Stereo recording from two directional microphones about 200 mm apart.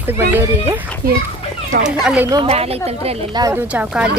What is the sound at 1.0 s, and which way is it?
Speech, 45° right (ahead or behind).